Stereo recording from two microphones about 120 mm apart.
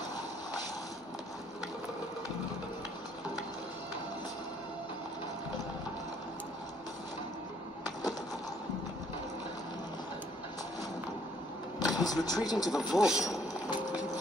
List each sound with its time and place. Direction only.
11.8 s vehicle: 35° left (ahead or behind)
12.3 s speech: 35° left (ahead or behind)
12.5 s speech: 5° right (ahead or behind)